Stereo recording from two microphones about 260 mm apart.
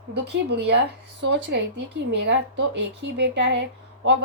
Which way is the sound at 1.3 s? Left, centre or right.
Right.